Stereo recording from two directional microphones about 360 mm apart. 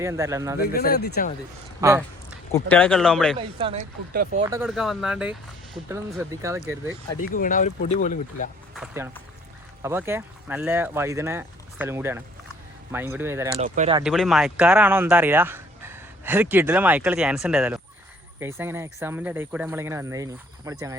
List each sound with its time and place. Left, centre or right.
0.0 s speech: centre
0.6 s speech: left
1.8 s speech: centre
2.5 s speech: centre
3.3 s speech: centre
4.4 s speech: centre
7.3 s speech: left
8.7 s speech: centre
13.6 s speech: centre
14.0 s speech: centre